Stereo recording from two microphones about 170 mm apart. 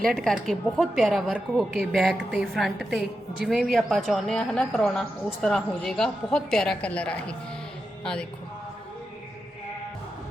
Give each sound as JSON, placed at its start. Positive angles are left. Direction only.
{"t": 0.1, "sound": "speech", "side_deg": 0}